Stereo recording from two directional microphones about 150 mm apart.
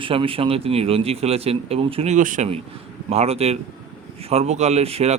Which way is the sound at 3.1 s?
45° right (ahead or behind).